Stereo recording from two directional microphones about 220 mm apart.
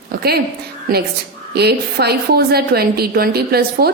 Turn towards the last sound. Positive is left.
turn(degrees=-45)  # may be behind; listen again after turning